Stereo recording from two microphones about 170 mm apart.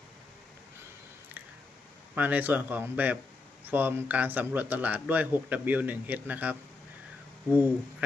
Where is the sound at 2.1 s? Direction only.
10° right (ahead or behind).